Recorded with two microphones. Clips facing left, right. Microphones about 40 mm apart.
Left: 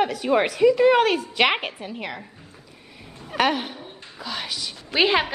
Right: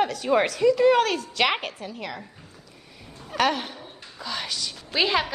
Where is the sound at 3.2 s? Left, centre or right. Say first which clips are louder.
Left 2 dB; centre.